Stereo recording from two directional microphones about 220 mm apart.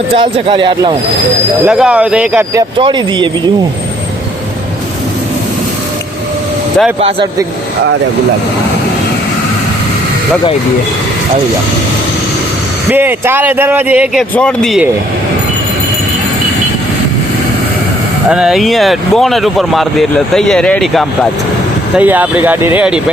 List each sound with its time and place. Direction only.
0.1 s speech: 25° right (ahead or behind)
1.6 s speech: 5° right (ahead or behind); by 3.5 s 20° right (ahead or behind)
7.0 s speech: 25° right (ahead or behind)
12.9 s speech: 10° right (ahead or behind)
18.3 s speech: 5° right (ahead or behind)